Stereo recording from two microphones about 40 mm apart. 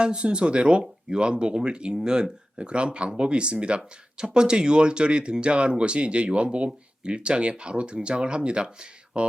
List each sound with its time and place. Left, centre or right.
0.0 s speech: right